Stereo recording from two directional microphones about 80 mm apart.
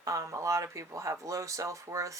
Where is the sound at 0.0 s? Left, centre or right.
Right.